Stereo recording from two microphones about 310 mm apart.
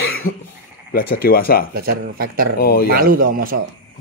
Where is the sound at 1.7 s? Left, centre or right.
Right.